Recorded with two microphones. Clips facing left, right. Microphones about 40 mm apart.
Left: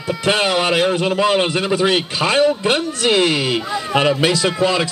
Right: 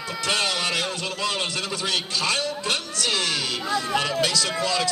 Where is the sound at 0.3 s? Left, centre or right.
Left.